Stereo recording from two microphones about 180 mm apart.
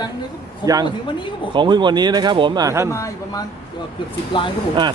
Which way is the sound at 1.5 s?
25° right (ahead or behind).